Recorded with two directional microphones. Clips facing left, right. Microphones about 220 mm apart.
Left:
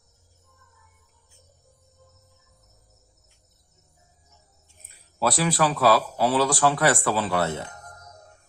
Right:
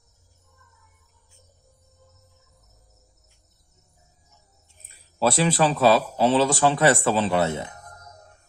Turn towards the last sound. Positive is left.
turn(degrees=-15)  # may be behind; listen again after turning